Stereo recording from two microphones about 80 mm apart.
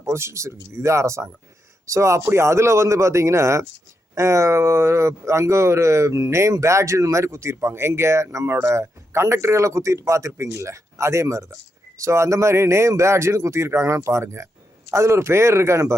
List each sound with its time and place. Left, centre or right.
0.0 s speech: right